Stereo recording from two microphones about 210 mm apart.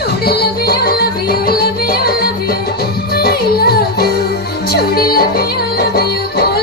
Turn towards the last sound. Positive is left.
turn(degrees=45)  # may be behind; listen again after turning